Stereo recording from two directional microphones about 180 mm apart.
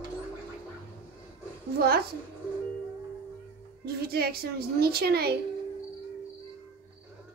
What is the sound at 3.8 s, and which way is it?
A child's voice, 60° right (ahead or behind).